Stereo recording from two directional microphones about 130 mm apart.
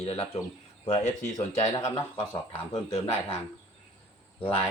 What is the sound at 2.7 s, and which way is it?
Speech, 45° left (ahead or behind).